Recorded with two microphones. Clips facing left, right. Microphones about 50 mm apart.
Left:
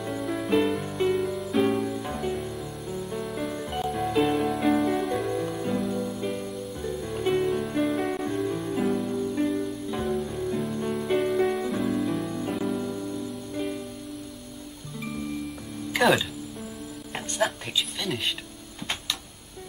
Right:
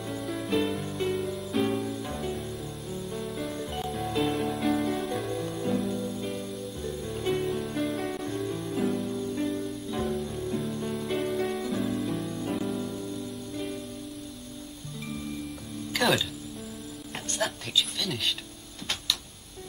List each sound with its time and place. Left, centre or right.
0.0 s music: centre
4.8 s music: centre
16.0 s music: centre
17.4 s a sound: centre